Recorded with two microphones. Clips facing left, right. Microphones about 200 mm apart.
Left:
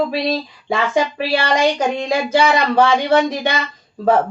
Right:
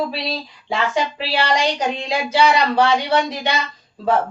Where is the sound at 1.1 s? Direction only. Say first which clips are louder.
Left 3 dB; 50° left (ahead or behind).